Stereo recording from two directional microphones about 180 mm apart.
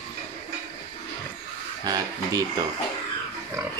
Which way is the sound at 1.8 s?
20° right (ahead or behind).